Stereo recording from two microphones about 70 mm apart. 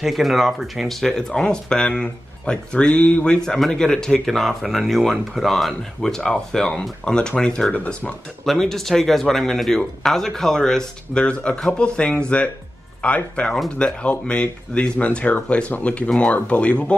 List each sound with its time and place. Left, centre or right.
0.0 s speech: centre; by 8.1 s left
8.5 s speech: centre